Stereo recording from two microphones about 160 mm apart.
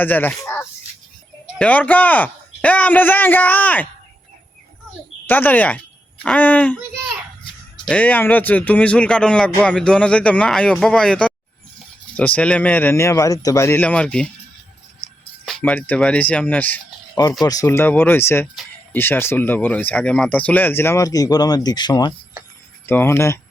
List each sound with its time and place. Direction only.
0.0 s speech: 10° left (ahead or behind)
5.2 s speech: 10° left (ahead or behind)
7.9 s speech: 10° left (ahead or behind)
15.4 s speech: 5° left (ahead or behind)
17.4 s speech: 20° left (ahead or behind)
22.9 s speech: 15° left (ahead or behind)